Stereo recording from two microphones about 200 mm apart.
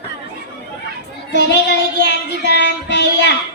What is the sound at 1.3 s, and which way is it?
Speech, 60° left (ahead or behind).